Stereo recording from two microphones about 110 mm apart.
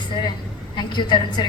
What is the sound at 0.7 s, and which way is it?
Speech, 40° left (ahead or behind).